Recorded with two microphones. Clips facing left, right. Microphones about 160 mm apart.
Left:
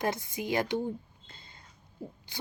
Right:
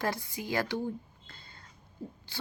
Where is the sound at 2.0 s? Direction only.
10° left (ahead or behind).